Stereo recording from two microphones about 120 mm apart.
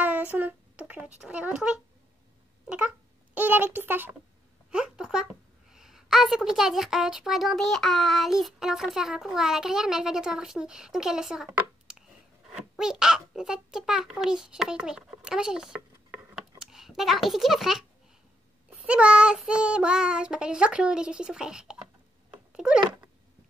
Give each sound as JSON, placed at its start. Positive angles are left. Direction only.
{"t": 0.0, "sound": "a child's voice", "side_deg": -15}
{"t": 3.3, "sound": "child singing", "side_deg": -15}
{"t": 4.6, "sound": "a woman's voice", "side_deg": -5}
{"t": 18.7, "sound": "child singing", "side_deg": -10}
{"t": 22.5, "sound": "cat", "side_deg": -5}